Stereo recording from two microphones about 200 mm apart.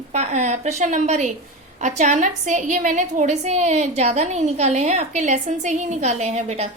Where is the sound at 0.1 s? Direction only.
35° right (ahead or behind).